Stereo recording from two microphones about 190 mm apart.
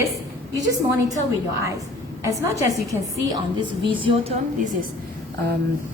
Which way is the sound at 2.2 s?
15° right (ahead or behind).